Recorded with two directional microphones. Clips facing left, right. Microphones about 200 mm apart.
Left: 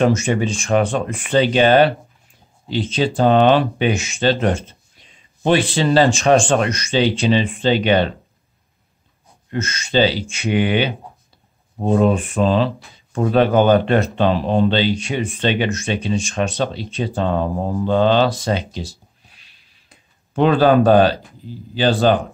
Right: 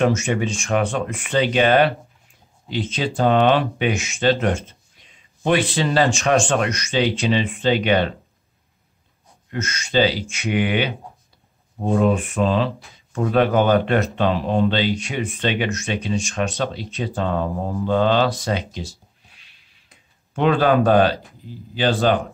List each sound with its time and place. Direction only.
0.0 s speech: 35° left (ahead or behind)
9.5 s speech: 30° left (ahead or behind)
20.3 s speech: 35° left (ahead or behind)